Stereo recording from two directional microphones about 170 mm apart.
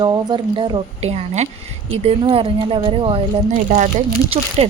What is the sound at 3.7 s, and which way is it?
A woman's voice, 45° right (ahead or behind).